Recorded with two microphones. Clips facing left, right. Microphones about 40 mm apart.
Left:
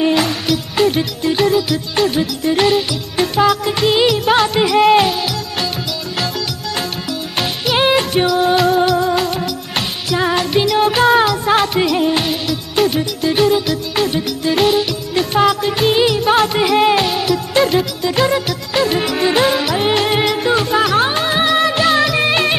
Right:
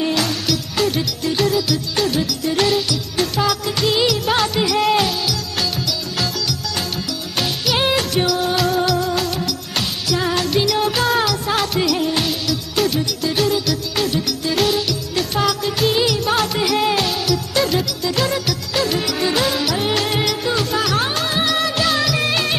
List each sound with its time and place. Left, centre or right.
0.0 s music: left
7.1 s music: centre